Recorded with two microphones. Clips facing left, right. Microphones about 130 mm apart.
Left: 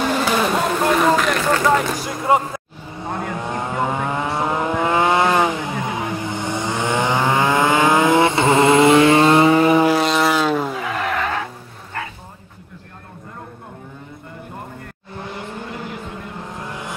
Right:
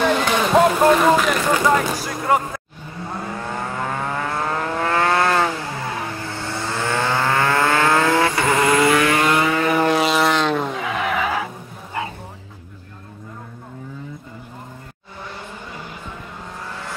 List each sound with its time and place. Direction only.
0.2 s vehicle: centre (ahead or behind)
0.8 s speech: centre (ahead or behind)
2.0 s speech: 20° left (ahead or behind)
3.2 s vehicle: 15° left (ahead or behind)
9.8 s vehicle: centre (ahead or behind)